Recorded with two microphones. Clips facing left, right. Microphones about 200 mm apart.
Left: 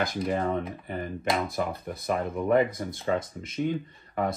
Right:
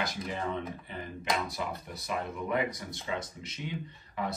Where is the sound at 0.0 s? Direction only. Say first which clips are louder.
Left 7 dB; 50° left (ahead or behind).